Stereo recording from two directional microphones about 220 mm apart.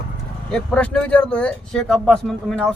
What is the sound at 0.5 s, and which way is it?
Speech, 5° left (ahead or behind).